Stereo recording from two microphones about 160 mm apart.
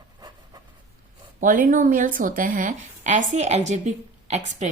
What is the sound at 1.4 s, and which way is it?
A woman's voice, 55° right (ahead or behind).